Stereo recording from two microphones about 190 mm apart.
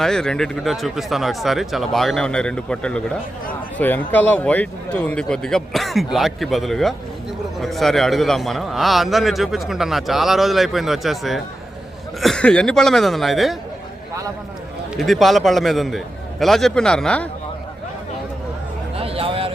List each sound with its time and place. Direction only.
0.0 s a man's voice: 5° left (ahead or behind)
14.9 s a man's voice: centre (ahead or behind)
18.9 s a sound: 30° right (ahead or behind)